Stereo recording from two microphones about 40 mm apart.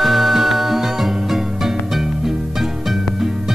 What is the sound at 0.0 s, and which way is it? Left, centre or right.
Music, centre.